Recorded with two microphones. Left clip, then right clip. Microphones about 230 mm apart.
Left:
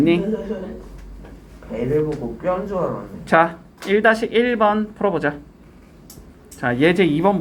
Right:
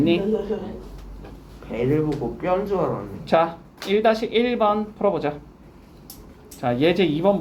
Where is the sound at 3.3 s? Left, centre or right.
Left.